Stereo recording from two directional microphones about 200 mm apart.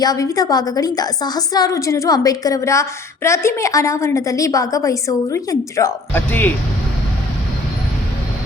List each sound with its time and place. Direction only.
0.0 s a woman's voice: 20° left (ahead or behind)